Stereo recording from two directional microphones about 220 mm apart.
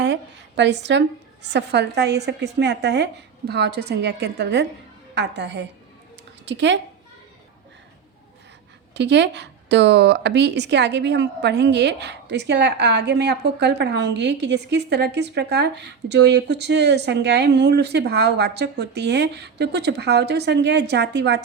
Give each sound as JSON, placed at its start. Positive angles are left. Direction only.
{"t": 0.0, "sound": "a woman's voice", "side_deg": -50}
{"t": 9.0, "sound": "a woman's voice", "side_deg": -50}